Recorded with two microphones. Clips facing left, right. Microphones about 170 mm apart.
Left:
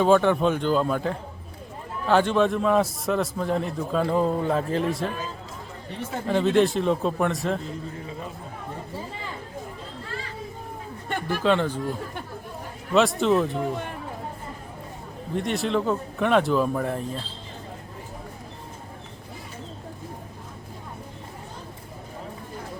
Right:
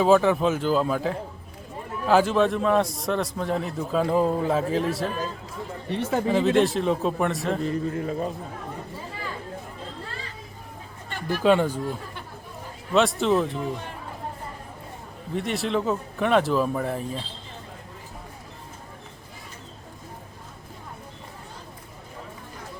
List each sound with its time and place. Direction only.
0.0 s a man's voice: 5° right (ahead or behind)
5.9 s speech: 75° right (ahead or behind)
6.2 s a man's voice: centre (ahead or behind)
7.6 s a man's voice: 60° right (ahead or behind)
11.1 s chatter: 50° left (ahead or behind)
11.4 s speech: 10° right (ahead or behind)
12.9 s a man's voice: centre (ahead or behind)
15.4 s a man's voice: centre (ahead or behind)